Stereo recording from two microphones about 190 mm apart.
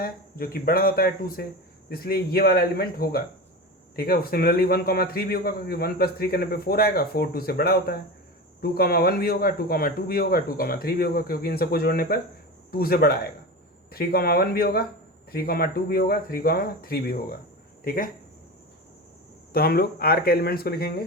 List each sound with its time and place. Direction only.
0.0 s a man's voice: 50° left (ahead or behind)
19.5 s a man's voice: 55° left (ahead or behind)